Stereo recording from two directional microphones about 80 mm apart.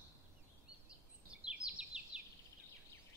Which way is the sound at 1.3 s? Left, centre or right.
Centre.